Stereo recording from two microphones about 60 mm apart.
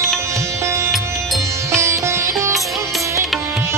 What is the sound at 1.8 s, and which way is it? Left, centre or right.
Sitar, right.